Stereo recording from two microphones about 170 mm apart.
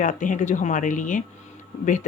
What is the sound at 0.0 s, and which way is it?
Speech, 50° left (ahead or behind).